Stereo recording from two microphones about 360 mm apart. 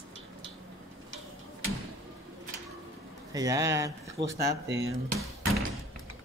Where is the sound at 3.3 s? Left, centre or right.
Centre.